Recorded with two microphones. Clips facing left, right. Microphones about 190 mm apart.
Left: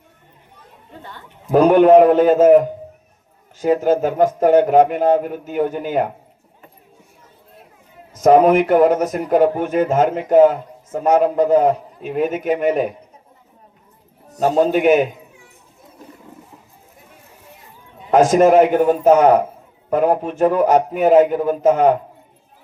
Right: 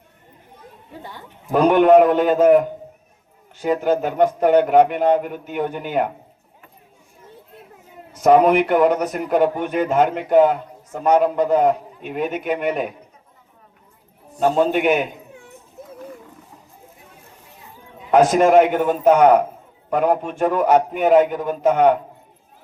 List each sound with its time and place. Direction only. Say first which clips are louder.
0.9 s speech: right 1 dB; 10° right (ahead or behind)
1.5 s speech: left 3 dB; 40° left (ahead or behind)
8.2 s speech: left 2 dB; 45° left (ahead or behind)
14.3 s a man's voice: left 2 dB; 40° left (ahead or behind)
18.1 s speech: left 2 dB; 40° left (ahead or behind)